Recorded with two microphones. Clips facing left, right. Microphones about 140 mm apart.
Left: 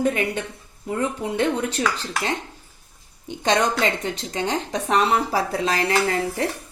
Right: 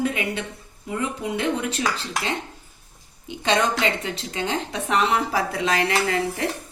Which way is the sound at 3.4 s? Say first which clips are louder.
Left 1 dB; 35° left (ahead or behind).